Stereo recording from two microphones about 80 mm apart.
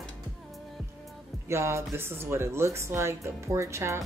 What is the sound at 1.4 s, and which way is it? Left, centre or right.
Speech, right.